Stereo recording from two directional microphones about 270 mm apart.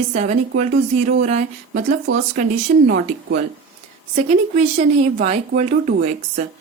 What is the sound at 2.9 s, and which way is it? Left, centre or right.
Speech, right.